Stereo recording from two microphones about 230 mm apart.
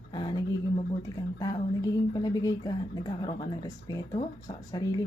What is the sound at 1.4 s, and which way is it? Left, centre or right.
A woman's voice, centre.